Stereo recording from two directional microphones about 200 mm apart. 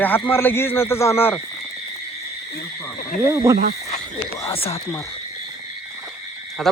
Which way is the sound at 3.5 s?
45° right (ahead or behind).